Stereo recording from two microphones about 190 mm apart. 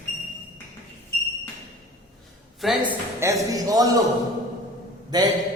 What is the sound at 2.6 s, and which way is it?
Speech, centre (ahead or behind).